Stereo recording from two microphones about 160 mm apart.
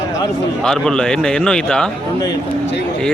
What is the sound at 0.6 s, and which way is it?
A man's voice, 5° left (ahead or behind).